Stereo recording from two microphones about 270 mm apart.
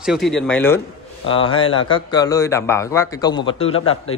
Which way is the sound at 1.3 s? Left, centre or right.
Centre.